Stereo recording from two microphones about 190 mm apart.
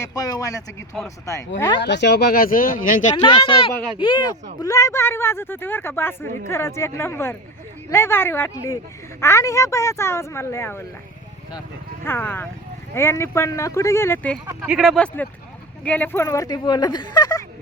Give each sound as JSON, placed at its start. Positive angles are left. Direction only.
{"t": 0.0, "sound": "speech", "side_deg": 20}
{"t": 1.8, "sound": "speech", "side_deg": 60}
{"t": 3.2, "sound": "speech", "side_deg": 30}
{"t": 6.2, "sound": "a woman's voice", "side_deg": -50}
{"t": 6.5, "sound": "speech", "side_deg": 15}
{"t": 12.0, "sound": "speech", "side_deg": 10}
{"t": 14.4, "sound": "speech", "side_deg": -5}